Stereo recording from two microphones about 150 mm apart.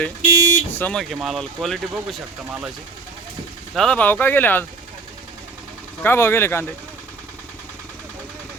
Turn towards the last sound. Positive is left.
turn(degrees=15)  # may be behind; listen again after turning